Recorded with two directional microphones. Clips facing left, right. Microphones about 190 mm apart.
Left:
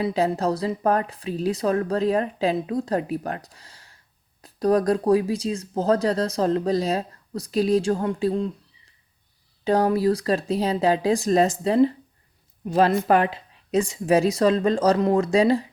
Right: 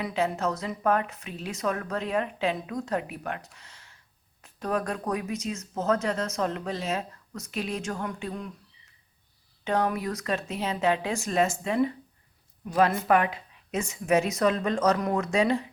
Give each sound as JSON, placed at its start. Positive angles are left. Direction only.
{"t": 0.0, "sound": "speech", "side_deg": 35}
{"t": 9.6, "sound": "speech", "side_deg": 35}